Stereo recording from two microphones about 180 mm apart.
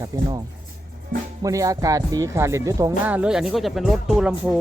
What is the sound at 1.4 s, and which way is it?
Speech, 20° right (ahead or behind).